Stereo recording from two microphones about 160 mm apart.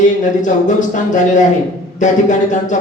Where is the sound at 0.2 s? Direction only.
50° left (ahead or behind).